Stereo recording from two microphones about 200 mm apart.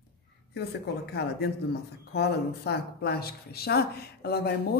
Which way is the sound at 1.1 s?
55° left (ahead or behind).